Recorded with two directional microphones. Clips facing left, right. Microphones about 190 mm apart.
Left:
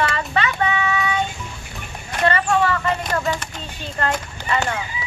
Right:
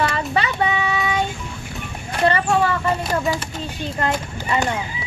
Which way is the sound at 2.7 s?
10° right (ahead or behind).